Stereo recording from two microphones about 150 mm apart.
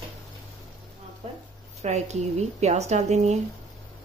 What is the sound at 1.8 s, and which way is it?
Speech, 50° right (ahead or behind).